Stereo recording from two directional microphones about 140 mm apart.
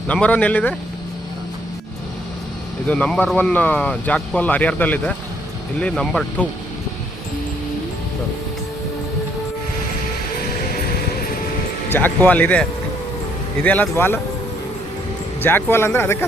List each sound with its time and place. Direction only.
0.1 s speech: 10° left (ahead or behind)
2.8 s speech: 10° left (ahead or behind)
10.6 s music: 90° left
11.9 s speech: 15° left (ahead or behind)
13.7 s speech: 15° left (ahead or behind)
15.4 s speech: 15° left (ahead or behind)